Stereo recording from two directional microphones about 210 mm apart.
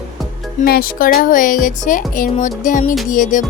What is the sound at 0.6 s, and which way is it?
Speech, 45° left (ahead or behind).